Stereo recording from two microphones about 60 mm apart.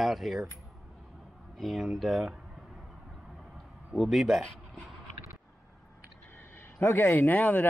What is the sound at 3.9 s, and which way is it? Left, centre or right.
Speech, centre.